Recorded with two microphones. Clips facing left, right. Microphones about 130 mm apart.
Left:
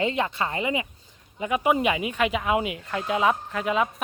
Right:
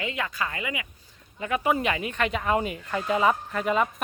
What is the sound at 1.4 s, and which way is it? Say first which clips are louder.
Speech: left 2 dB; 15° left (ahead or behind).